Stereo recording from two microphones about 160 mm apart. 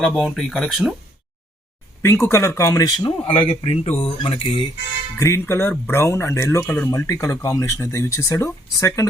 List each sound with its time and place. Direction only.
0.0 s speech: centre (ahead or behind)
2.0 s speech: 15° left (ahead or behind); by 4.6 s 35° left (ahead or behind)
5.1 s speech: 15° left (ahead or behind)